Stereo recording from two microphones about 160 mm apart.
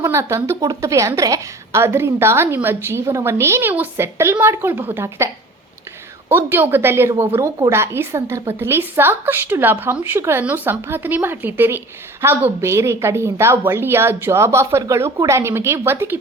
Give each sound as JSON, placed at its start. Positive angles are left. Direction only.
{"t": 0.0, "sound": "a woman's voice", "side_deg": -15}